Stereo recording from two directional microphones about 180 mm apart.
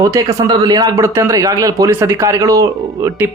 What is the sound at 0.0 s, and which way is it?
Speech, 20° right (ahead or behind).